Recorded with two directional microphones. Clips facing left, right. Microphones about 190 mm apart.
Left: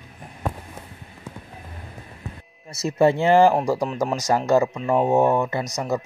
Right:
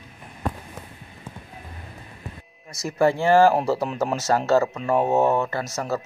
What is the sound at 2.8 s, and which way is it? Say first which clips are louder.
Speech: left 2 dB; 20° left (ahead or behind).